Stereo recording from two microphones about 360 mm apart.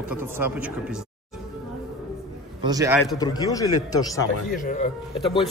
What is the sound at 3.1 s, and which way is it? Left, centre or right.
Speech, centre.